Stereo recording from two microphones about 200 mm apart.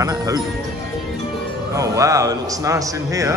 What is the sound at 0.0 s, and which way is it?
Music, 15° right (ahead or behind).